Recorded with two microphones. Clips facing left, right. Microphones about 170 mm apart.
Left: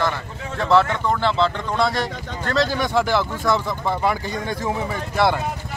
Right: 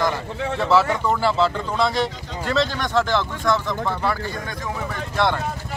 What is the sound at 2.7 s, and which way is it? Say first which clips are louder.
Speech: left 1 dB; 10° left (ahead or behind).